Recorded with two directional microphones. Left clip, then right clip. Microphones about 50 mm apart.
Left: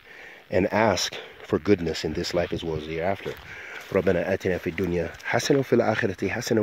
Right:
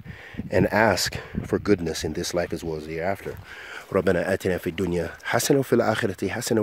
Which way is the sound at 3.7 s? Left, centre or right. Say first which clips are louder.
Right 1 dB; right.